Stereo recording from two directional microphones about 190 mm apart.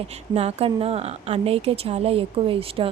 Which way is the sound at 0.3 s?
30° right (ahead or behind).